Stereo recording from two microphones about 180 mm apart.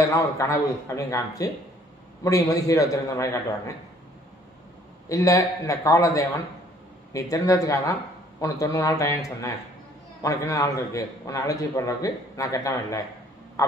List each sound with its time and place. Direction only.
0.1 s a man's voice: 15° left (ahead or behind)
5.0 s a man's voice: 20° left (ahead or behind)